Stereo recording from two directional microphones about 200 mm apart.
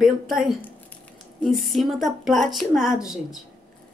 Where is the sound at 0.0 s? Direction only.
Centre (ahead or behind).